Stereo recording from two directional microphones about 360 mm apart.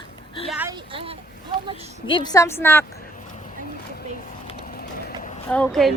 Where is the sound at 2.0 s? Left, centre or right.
Centre.